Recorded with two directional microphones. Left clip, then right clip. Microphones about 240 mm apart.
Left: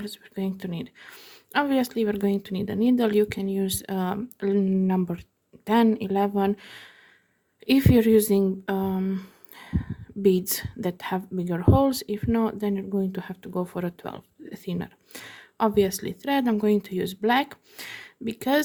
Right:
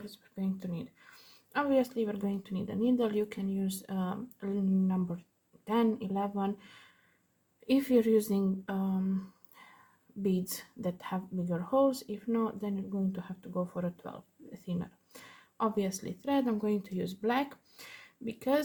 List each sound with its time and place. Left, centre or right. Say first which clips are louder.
0.0 s speech: left 9 dB; left